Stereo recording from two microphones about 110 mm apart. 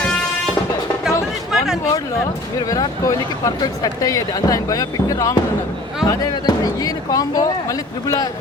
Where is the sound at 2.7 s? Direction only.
30° left (ahead or behind).